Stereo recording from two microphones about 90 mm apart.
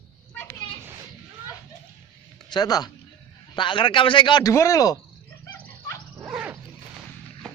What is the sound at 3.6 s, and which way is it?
Speech, 65° left (ahead or behind).